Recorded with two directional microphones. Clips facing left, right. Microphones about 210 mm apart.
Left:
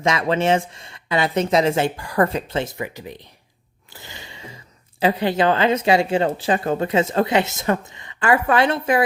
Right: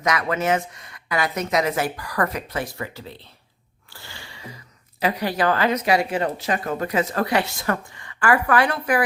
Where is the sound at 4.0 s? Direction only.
20° left (ahead or behind).